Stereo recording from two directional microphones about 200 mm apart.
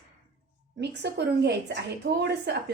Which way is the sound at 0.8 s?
60° right (ahead or behind).